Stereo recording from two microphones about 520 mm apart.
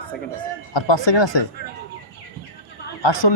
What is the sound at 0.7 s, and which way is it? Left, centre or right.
Speech, left.